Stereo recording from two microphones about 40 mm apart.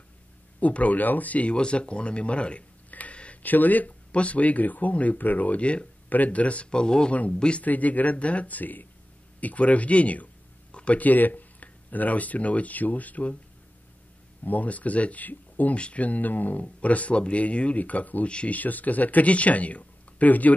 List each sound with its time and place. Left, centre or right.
0.6 s speech: left
2.9 s a sound: left
3.4 s speech: left
4.1 s speech: left
6.0 s speech: left
6.7 s speech: centre
7.1 s speech: left
7.3 s speech: left
7.6 s speech: left
10.7 s a sound: left
11.0 s speech: left
14.4 s speech: left
15.7 s speech: left
16.6 s speech: left